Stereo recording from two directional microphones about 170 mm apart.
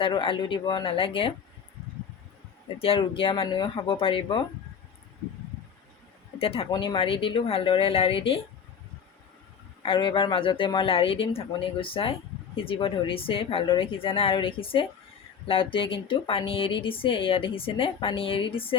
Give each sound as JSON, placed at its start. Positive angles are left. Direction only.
{"t": 0.0, "sound": "a woman's voice", "side_deg": 30}
{"t": 2.8, "sound": "a woman's voice", "side_deg": 35}
{"t": 6.4, "sound": "a woman's voice", "side_deg": 35}
{"t": 9.8, "sound": "a woman's voice", "side_deg": 30}